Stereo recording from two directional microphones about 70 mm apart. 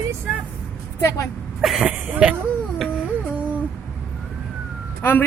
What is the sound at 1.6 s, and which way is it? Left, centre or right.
Speech, centre.